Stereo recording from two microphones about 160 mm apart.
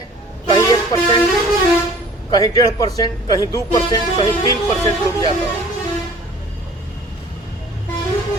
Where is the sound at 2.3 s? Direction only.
25° left (ahead or behind).